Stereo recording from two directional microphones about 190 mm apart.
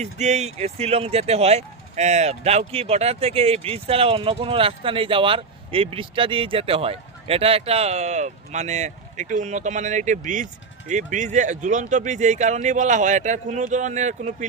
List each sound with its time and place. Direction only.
0.0 s speech: 35° right (ahead or behind)